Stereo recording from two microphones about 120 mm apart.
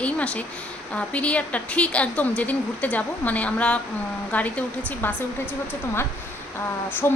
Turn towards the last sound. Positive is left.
turn(degrees=20)  # may be behind; listen again after turning